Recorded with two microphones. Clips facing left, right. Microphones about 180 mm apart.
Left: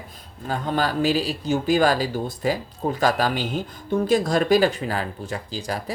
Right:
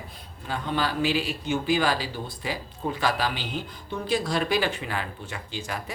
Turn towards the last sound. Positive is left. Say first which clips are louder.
# left 5 dB
turn(degrees=35)  # may be behind; listen again after turning